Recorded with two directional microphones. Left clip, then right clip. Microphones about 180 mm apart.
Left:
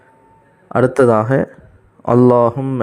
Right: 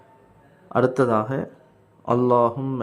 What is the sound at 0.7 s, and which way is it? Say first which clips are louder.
Speech: left 7 dB; 30° left (ahead or behind).